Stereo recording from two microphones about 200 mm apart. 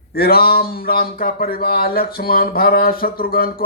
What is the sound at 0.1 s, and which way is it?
Speech, 50° left (ahead or behind).